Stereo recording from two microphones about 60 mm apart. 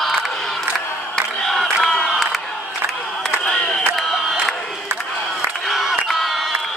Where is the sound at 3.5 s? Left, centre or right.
Centre.